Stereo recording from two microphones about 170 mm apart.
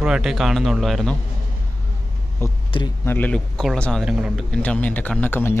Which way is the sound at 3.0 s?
10° left (ahead or behind).